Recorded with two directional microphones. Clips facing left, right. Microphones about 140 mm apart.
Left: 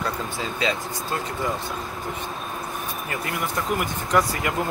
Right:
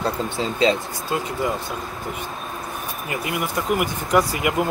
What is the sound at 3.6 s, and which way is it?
Speech, 15° right (ahead or behind).